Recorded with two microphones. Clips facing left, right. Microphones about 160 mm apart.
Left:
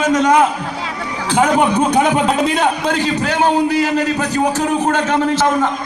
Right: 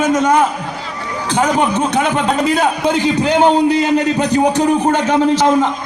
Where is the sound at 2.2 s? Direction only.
Centre (ahead or behind).